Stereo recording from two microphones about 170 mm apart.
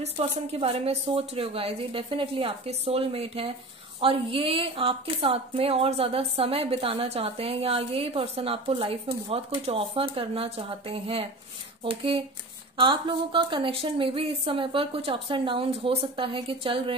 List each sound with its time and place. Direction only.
0.0 s a woman's voice: 40° right (ahead or behind)